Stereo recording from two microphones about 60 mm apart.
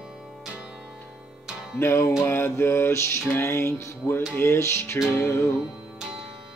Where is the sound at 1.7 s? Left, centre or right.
Left.